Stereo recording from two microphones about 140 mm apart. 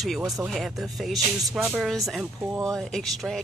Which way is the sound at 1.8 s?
Centre (ahead or behind).